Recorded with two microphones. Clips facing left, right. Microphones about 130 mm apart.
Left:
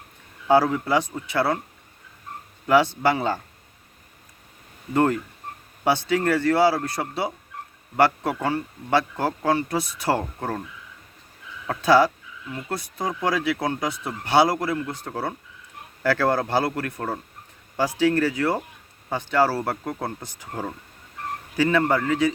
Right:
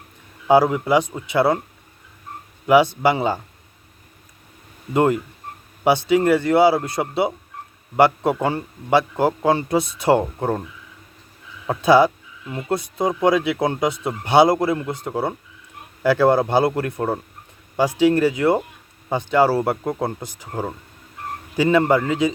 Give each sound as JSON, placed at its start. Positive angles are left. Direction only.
{"t": 0.4, "sound": "speech", "side_deg": -15}
{"t": 2.6, "sound": "speech", "side_deg": -15}
{"t": 4.9, "sound": "speech", "side_deg": -15}
{"t": 11.6, "sound": "speech", "side_deg": -20}